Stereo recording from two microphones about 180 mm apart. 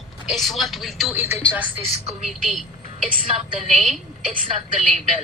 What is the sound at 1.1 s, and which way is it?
Speech, 15° right (ahead or behind).